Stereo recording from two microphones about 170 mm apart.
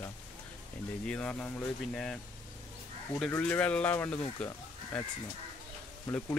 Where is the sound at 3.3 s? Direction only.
10° left (ahead or behind).